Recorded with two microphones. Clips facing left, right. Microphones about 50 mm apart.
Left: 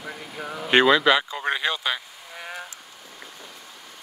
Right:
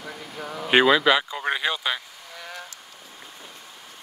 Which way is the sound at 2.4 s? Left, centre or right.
Left.